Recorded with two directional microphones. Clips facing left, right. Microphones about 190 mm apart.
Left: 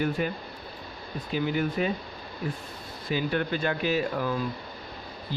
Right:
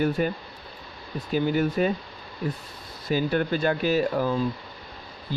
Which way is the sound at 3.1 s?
40° right (ahead or behind).